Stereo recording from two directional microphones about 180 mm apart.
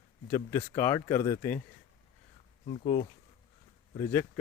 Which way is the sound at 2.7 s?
35° left (ahead or behind).